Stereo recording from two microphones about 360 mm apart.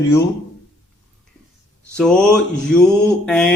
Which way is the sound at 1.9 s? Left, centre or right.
Centre.